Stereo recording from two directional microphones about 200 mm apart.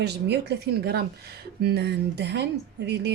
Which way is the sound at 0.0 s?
55° right (ahead or behind).